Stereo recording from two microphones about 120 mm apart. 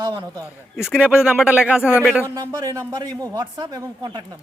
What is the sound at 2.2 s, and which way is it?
A man's voice, 30° right (ahead or behind).